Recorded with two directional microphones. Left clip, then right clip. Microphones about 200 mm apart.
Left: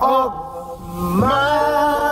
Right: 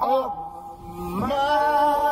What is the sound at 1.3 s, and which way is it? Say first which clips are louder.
Speech: left 2 dB; 15° right (ahead or behind).